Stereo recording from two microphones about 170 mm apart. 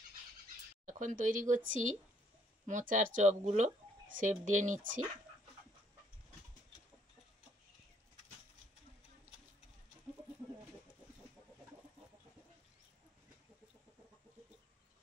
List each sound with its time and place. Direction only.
0.8 s speech: 50° right (ahead or behind)